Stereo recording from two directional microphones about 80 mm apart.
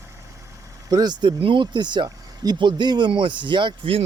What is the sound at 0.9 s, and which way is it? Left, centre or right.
Speech, right.